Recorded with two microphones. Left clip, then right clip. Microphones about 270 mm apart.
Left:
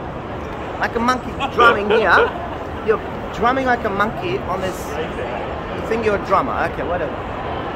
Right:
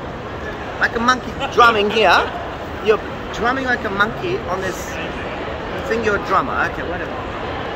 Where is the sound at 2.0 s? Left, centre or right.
Right.